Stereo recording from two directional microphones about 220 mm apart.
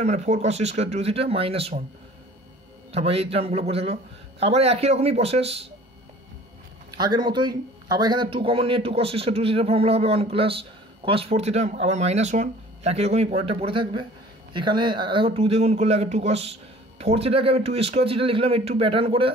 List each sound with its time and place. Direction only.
0.0 s speech: 30° right (ahead or behind)
2.9 s speech: 25° right (ahead or behind)
7.0 s speech: 20° right (ahead or behind)